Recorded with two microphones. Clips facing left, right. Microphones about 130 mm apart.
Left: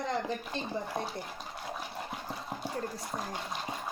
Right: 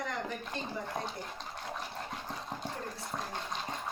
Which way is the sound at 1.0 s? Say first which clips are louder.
Left 2 dB; 10° left (ahead or behind).